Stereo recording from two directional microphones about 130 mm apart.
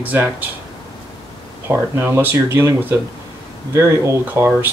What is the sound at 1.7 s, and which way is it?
Speech, 20° right (ahead or behind).